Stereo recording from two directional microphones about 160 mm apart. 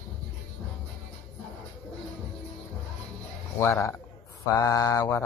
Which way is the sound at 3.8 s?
20° left (ahead or behind).